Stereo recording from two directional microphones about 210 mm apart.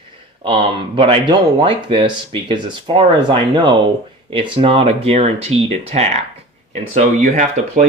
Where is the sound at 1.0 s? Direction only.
25° right (ahead or behind).